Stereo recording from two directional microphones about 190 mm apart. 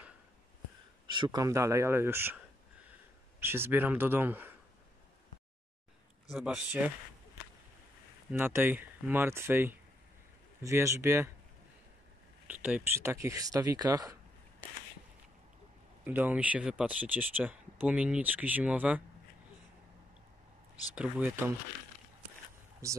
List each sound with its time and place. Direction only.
1.1 s speech: 20° right (ahead or behind)
3.3 s speech: 10° right (ahead or behind)
6.3 s speech: 5° right (ahead or behind)
8.3 s speech: 10° right (ahead or behind)
12.4 s speech: 10° right (ahead or behind)
16.0 s speech: 10° right (ahead or behind)
20.9 s speech: 5° right (ahead or behind)
22.8 s speech: 15° right (ahead or behind)